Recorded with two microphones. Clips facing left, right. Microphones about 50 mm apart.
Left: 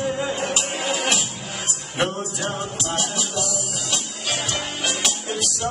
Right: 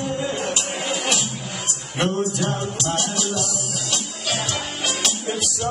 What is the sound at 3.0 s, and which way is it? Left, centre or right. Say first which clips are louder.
Music: right 1 dB; right.